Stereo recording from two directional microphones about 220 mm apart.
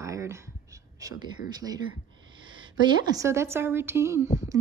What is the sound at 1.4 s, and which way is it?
Speech, 55° left (ahead or behind).